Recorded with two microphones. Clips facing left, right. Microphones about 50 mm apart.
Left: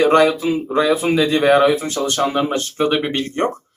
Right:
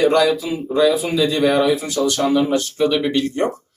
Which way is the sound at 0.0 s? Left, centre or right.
Left.